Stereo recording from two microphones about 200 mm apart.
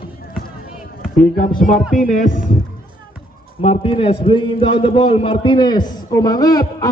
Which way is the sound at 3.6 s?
30° left (ahead or behind).